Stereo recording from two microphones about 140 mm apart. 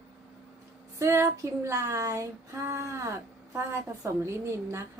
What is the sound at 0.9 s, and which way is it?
Female singing, 20° right (ahead or behind).